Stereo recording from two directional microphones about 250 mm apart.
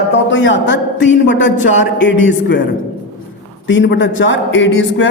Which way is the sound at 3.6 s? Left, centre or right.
Left.